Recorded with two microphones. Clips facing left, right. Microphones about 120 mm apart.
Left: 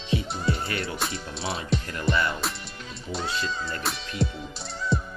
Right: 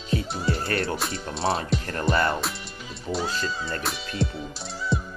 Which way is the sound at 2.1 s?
40° right (ahead or behind).